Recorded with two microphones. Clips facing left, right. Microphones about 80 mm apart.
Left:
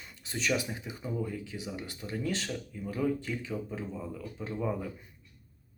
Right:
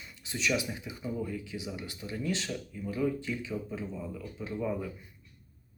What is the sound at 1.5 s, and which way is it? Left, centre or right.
Speech, left.